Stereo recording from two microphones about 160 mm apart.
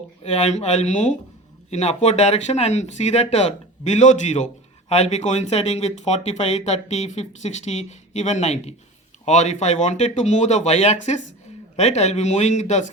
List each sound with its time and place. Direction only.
0.2 s speech: 40° left (ahead or behind)